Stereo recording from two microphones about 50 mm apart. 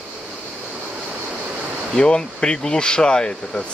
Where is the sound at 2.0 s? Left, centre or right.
Centre.